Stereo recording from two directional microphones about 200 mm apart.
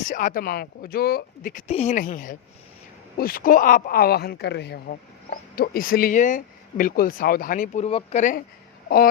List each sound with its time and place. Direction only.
0.1 s speech: 40° left (ahead or behind)